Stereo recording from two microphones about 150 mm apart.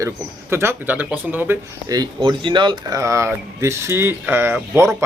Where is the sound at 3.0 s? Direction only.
20° right (ahead or behind).